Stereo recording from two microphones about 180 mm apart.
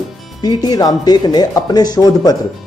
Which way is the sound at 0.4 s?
20° left (ahead or behind).